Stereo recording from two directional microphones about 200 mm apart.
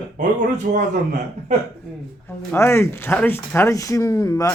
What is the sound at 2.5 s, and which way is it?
Speech, 15° left (ahead or behind).